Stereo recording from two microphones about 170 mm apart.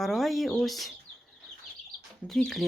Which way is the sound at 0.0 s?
Centre (ahead or behind).